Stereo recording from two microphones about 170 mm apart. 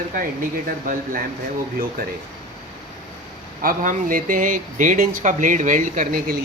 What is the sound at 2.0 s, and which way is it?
Speech, 60° right (ahead or behind).